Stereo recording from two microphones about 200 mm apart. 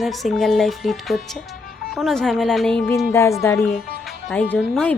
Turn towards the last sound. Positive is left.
turn(degrees=5)  # may be behind; listen again after turning